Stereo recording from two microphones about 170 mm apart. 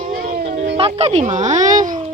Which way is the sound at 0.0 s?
55° right (ahead or behind).